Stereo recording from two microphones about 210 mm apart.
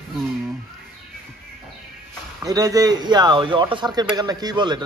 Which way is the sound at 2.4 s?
15° right (ahead or behind).